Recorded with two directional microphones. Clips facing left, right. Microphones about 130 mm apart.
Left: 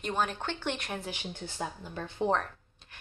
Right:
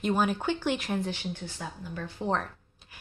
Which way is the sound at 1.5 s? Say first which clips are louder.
Left 1 dB; 25° left (ahead or behind).